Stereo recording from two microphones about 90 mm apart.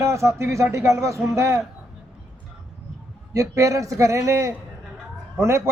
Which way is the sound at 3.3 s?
40° right (ahead or behind).